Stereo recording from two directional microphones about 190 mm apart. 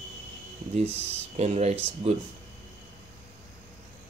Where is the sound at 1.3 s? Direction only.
35° right (ahead or behind).